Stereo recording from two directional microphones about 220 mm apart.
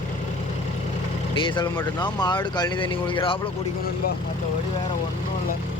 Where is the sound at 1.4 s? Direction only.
20° left (ahead or behind).